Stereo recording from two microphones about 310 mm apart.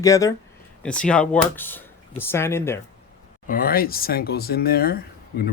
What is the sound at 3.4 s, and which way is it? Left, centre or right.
Speech, left.